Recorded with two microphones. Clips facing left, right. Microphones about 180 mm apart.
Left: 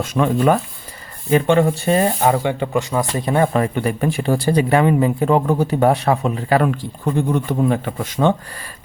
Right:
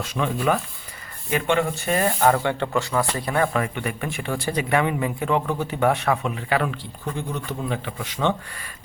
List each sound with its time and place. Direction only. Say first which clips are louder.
0.0 s speech: left 7 dB; 45° left (ahead or behind)
1.3 s speech: left 7 dB; 35° left (ahead or behind)
2.3 s a man's voice: left 4 dB; 15° left (ahead or behind)
3.5 s speech: left 7 dB; 35° left (ahead or behind)